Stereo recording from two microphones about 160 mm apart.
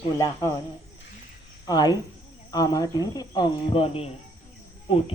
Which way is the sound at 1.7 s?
25° left (ahead or behind).